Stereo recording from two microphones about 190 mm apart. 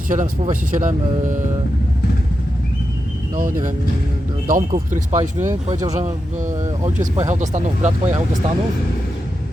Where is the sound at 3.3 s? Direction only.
45° right (ahead or behind).